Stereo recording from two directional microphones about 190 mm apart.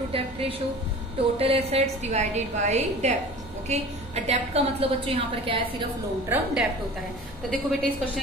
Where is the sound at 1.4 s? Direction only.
30° right (ahead or behind).